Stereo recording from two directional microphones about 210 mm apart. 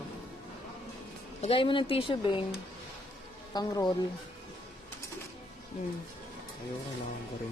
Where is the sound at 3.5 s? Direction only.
20° left (ahead or behind).